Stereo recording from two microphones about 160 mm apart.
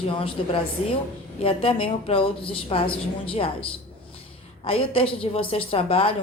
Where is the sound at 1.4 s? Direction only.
35° left (ahead or behind).